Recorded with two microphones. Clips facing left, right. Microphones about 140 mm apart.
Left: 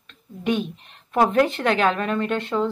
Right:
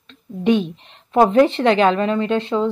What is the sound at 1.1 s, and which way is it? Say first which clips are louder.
Speech: right 5 dB; 25° right (ahead or behind).